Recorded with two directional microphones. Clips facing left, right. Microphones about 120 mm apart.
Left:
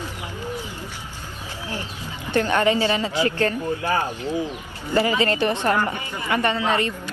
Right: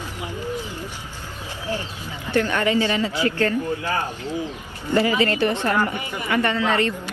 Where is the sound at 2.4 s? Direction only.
25° left (ahead or behind).